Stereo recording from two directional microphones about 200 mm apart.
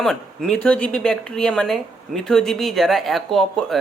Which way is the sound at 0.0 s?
Centre (ahead or behind).